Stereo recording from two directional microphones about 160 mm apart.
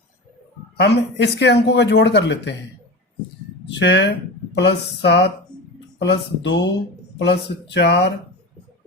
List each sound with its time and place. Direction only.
0.8 s speech: 90° left
3.7 s speech: 90° left
7.7 s speech: 90° left